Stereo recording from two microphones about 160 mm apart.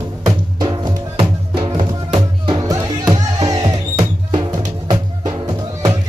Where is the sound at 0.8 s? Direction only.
30° right (ahead or behind).